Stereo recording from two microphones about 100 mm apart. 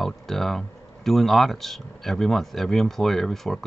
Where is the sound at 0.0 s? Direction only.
5° left (ahead or behind).